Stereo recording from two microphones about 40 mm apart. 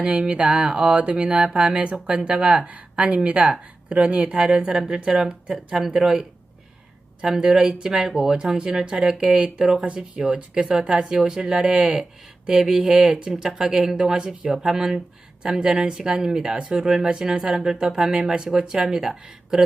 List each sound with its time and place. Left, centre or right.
0.0 s a woman's voice: right
7.3 s speech: centre
10.9 s speech: centre
15.5 s speech: right